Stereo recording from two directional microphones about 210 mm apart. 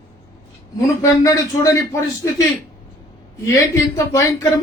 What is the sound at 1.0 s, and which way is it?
Speech, 15° left (ahead or behind).